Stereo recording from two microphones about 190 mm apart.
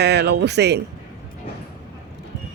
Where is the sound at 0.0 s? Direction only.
60° right (ahead or behind).